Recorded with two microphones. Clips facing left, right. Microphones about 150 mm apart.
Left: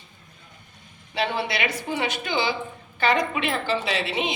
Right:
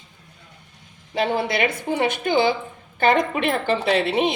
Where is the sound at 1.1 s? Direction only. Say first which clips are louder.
Right 4 dB; 45° right (ahead or behind).